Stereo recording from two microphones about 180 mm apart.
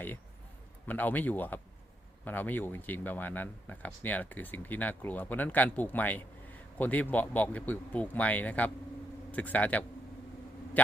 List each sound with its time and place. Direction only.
0.9 s speech: 10° left (ahead or behind)